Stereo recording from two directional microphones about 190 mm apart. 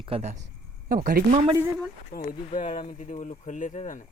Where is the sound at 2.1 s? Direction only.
45° left (ahead or behind).